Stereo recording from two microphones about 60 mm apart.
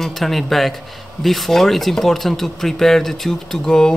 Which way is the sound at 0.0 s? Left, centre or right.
Centre.